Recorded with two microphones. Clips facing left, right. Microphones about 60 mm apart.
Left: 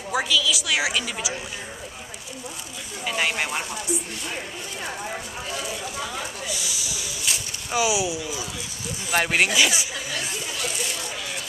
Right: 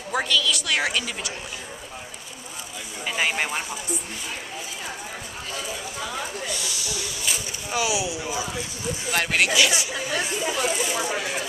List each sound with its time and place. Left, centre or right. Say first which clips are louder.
0.1 s a woman's voice: even; centre
3.1 s a woman's voice: even; centre
5.5 s speech: left 1 dB; centre
7.3 s a woman's voice: even; centre
7.7 s speech: left 2 dB; centre
9.9 s speech: right 4 dB; centre
10.6 s a woman's voice: right 5 dB; centre